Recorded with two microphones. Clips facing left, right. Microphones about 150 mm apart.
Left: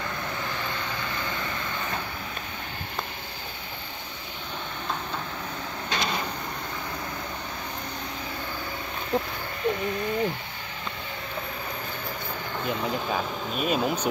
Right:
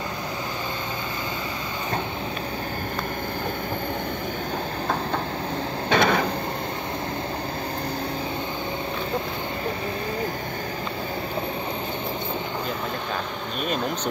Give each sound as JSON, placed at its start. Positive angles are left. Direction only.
{"t": 5.9, "sound": "printer", "side_deg": -60}
{"t": 13.6, "sound": "speech", "side_deg": 5}